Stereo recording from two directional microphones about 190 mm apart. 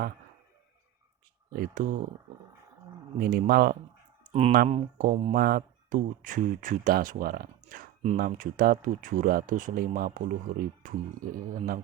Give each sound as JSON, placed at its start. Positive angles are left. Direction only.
{"t": 1.5, "sound": "speech", "side_deg": -45}
{"t": 3.2, "sound": "speech", "side_deg": -50}
{"t": 4.3, "sound": "speech", "side_deg": -35}
{"t": 4.7, "sound": "speech", "side_deg": -45}